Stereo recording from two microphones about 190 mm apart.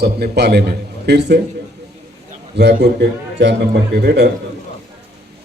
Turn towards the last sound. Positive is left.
turn(degrees=-60)  # may be behind; listen again after turning